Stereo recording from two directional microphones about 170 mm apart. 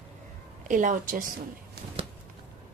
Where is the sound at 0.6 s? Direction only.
50° right (ahead or behind).